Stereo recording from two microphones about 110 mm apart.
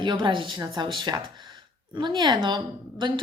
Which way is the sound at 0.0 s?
45° right (ahead or behind).